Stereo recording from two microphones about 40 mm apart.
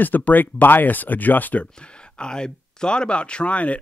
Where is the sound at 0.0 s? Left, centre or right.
Left.